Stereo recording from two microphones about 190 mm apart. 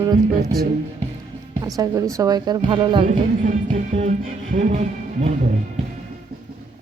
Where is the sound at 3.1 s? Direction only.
40° right (ahead or behind).